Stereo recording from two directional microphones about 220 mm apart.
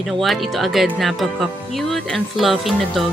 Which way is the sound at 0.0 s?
Centre (ahead or behind).